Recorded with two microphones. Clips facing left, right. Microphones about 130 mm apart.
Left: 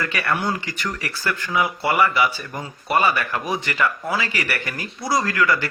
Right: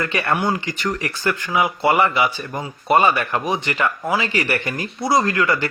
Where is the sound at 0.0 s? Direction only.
25° right (ahead or behind).